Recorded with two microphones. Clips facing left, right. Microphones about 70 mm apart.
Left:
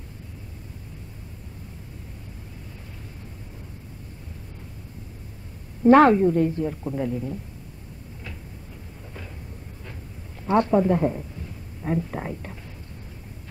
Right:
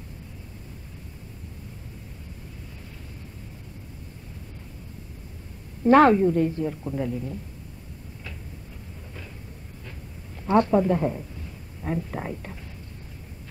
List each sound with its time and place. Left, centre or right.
5.9 s a woman's voice: centre
10.4 s a woman's voice: centre